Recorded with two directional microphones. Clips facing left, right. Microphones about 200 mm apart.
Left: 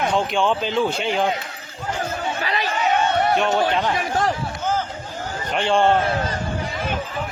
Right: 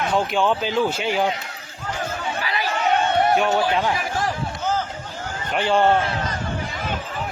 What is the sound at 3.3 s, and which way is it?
Speech, 5° right (ahead or behind).